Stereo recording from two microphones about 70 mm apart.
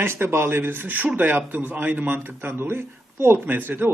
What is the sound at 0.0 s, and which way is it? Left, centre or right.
A man's voice, right.